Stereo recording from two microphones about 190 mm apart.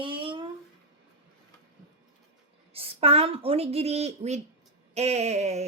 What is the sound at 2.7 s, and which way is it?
A woman's voice, 30° right (ahead or behind).